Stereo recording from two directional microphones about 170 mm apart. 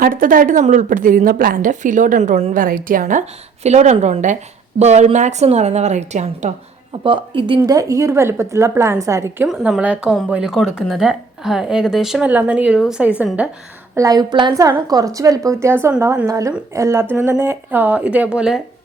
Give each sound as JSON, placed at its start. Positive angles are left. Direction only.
{"t": 0.0, "sound": "a woman's voice", "side_deg": -55}
{"t": 7.0, "sound": "a woman's voice", "side_deg": -30}
{"t": 9.5, "sound": "a woman's voice", "side_deg": -5}
{"t": 13.9, "sound": "a woman's voice", "side_deg": -20}